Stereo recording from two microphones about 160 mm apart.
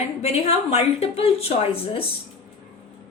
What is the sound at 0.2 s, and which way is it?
A woman's voice, 40° left (ahead or behind).